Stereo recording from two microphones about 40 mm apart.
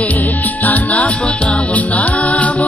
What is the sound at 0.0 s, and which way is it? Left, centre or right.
Music, left.